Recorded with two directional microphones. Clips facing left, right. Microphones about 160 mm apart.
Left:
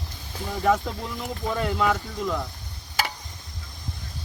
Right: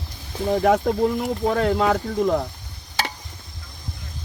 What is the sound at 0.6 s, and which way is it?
Speech, 60° right (ahead or behind).